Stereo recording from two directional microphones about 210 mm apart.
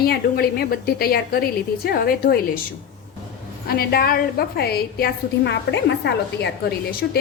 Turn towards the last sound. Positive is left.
turn(degrees=50)  # may be behind; listen again after turning